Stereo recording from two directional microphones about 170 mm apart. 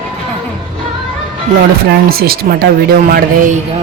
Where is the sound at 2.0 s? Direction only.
65° right (ahead or behind).